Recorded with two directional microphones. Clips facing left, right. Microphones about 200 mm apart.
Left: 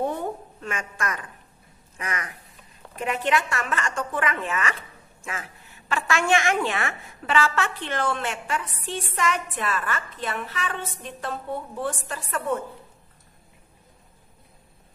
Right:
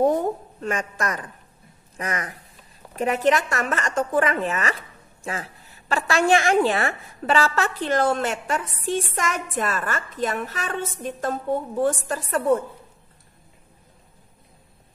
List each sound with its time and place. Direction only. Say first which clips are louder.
0.0 s a woman's voice: right 7 dB; 40° right (ahead or behind)